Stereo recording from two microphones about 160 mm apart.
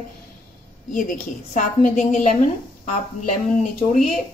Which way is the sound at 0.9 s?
55° left (ahead or behind).